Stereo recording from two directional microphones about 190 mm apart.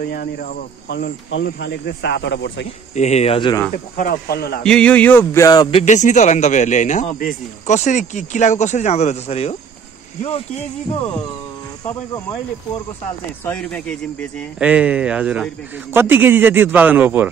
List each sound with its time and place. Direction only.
0.0 s speech: 50° left (ahead or behind); by 2.6 s 65° left (ahead or behind)
2.9 s speech: 35° left (ahead or behind)
3.7 s speech: 45° left (ahead or behind)
4.6 s speech: 5° left (ahead or behind); by 9.6 s 35° left (ahead or behind)
13.4 s speech: 5° left (ahead or behind)
14.6 s a man's voice: 5° right (ahead or behind)